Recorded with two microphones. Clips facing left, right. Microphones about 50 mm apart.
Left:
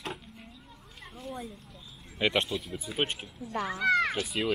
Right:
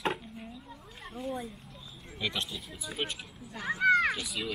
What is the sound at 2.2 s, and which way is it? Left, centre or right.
Speech, left.